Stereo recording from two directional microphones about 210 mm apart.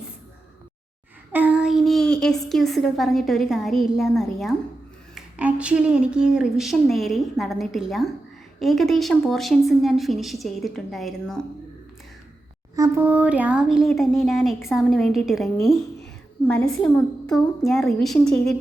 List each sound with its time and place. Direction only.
1.3 s a sound: 5° right (ahead or behind)
2.5 s a woman's voice: centre (ahead or behind)
12.7 s a woman's voice: 10° right (ahead or behind)
16.5 s a woman's voice: 5° left (ahead or behind)